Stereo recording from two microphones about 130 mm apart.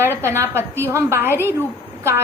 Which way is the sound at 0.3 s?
20° right (ahead or behind).